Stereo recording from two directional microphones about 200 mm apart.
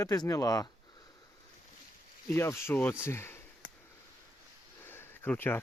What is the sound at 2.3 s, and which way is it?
Speech, 10° left (ahead or behind).